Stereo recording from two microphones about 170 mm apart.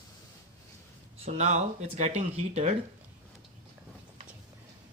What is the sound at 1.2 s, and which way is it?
Speech, 40° right (ahead or behind).